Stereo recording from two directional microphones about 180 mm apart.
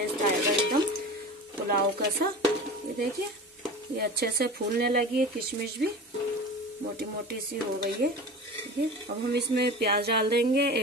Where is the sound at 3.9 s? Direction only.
60° right (ahead or behind).